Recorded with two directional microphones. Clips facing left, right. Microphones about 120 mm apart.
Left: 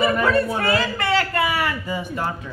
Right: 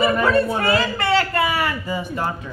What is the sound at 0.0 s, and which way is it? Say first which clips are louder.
A man's voice: right 1 dB; 30° right (ahead or behind).